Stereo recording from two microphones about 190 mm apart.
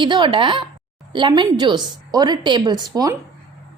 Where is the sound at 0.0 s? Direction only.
25° right (ahead or behind).